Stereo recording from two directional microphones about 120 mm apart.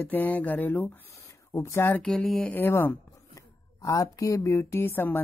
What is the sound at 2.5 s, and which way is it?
Speech, 20° left (ahead or behind).